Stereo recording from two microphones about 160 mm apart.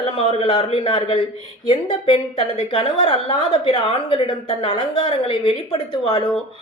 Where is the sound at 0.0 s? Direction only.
35° left (ahead or behind).